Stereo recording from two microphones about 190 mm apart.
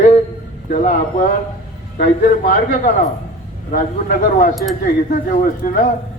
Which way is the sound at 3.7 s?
45° left (ahead or behind).